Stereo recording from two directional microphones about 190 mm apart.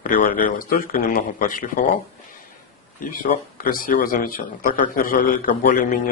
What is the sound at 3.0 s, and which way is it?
A man's voice, 45° left (ahead or behind).